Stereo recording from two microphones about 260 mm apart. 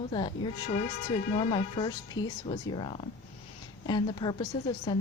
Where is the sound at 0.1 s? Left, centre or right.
Centre.